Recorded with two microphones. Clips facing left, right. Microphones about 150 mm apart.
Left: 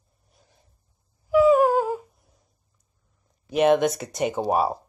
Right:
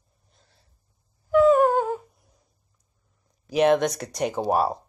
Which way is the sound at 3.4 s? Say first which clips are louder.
Left 1 dB; centre (ahead or behind).